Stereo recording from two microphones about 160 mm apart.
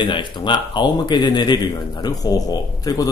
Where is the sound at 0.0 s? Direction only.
30° left (ahead or behind).